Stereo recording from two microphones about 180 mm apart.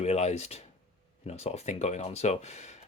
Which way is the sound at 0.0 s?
40° left (ahead or behind).